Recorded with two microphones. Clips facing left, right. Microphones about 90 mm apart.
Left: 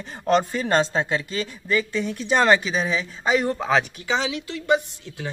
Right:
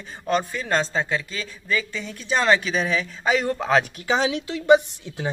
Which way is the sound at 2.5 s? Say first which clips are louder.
Left 1 dB; 15° left (ahead or behind).